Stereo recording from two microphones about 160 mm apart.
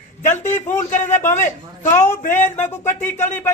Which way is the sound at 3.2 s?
15° left (ahead or behind).